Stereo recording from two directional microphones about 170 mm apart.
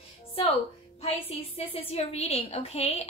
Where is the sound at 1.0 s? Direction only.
35° left (ahead or behind).